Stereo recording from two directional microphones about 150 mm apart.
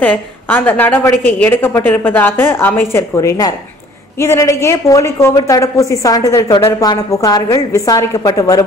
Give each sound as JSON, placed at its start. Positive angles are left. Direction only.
{"t": 0.0, "sound": "a woman's voice", "side_deg": 10}